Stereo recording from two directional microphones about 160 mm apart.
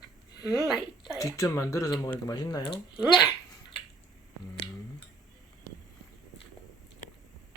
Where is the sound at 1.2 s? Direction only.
20° left (ahead or behind).